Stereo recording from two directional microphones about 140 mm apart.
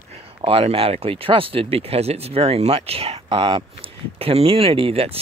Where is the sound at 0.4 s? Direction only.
40° right (ahead or behind).